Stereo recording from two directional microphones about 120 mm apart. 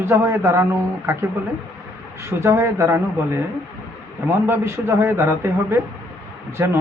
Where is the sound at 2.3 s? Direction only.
20° right (ahead or behind).